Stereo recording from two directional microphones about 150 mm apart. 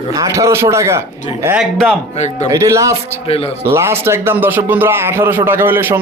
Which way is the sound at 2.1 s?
50° left (ahead or behind).